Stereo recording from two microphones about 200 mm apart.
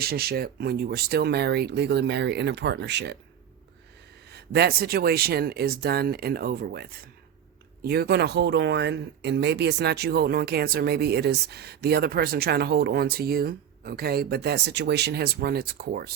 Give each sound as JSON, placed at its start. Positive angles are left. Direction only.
{"t": 0.0, "sound": "speech", "side_deg": -50}
{"t": 4.3, "sound": "speech", "side_deg": -55}
{"t": 7.9, "sound": "speech", "side_deg": -55}